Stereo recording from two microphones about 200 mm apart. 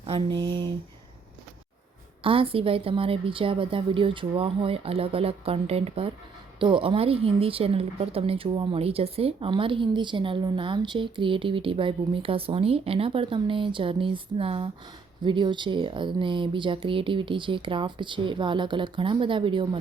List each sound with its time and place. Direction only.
0.0 s a woman's voice: 25° right (ahead or behind)
2.2 s a woman's voice: 25° right (ahead or behind)